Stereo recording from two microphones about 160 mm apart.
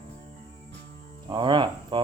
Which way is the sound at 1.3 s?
30° right (ahead or behind).